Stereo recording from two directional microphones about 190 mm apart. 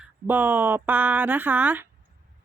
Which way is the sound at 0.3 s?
10° right (ahead or behind).